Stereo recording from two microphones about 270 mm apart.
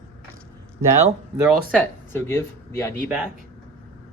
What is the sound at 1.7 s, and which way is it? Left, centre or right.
Speech, centre.